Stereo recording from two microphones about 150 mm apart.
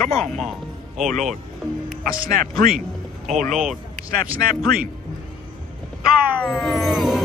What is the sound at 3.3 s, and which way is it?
Speech, 55° right (ahead or behind).